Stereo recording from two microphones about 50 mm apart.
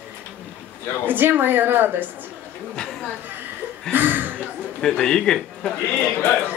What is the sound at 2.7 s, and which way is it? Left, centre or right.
Chatter, centre.